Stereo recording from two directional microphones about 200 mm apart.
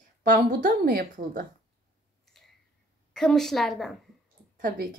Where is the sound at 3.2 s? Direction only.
Centre (ahead or behind).